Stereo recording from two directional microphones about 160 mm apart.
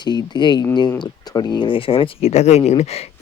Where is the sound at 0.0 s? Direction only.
25° left (ahead or behind).